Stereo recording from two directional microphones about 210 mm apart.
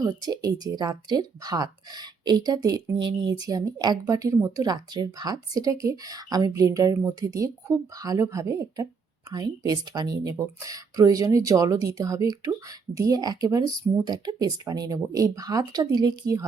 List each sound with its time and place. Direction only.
0.0 s speech: 20° right (ahead or behind)